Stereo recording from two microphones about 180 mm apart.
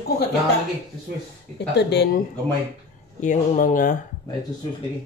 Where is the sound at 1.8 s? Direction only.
70° left (ahead or behind).